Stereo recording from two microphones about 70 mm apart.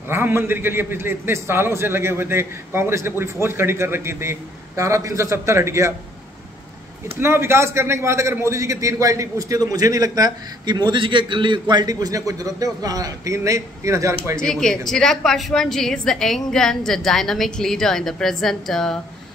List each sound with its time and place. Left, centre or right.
0.1 s a man's voice: right
7.2 s a man's voice: right
11.7 s a man's voice: right
14.4 s a woman's voice: centre